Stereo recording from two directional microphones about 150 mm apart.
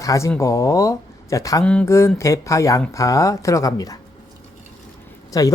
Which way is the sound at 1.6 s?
5° left (ahead or behind).